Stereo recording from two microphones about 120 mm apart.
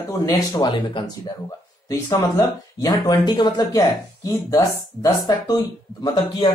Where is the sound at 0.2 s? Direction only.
30° left (ahead or behind).